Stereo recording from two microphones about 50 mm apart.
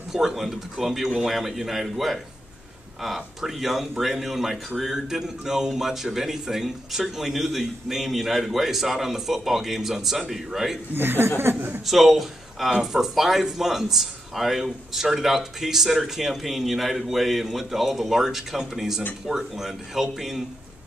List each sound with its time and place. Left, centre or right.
0.1 s speech: centre
11.0 s a woman's voice: right
11.8 s speech: centre